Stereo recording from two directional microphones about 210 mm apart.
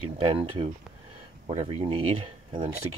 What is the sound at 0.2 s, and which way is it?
Speech, 25° right (ahead or behind).